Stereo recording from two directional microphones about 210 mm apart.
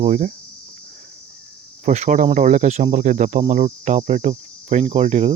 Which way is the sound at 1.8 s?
35° right (ahead or behind).